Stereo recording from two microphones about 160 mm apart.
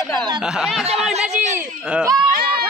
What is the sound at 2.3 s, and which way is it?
Speech, 70° right (ahead or behind).